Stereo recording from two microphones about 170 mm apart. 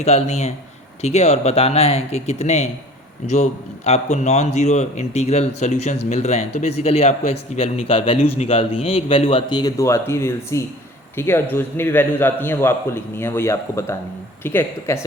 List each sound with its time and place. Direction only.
0.0 s a man's voice: 40° left (ahead or behind); by 15.0 s 15° left (ahead or behind)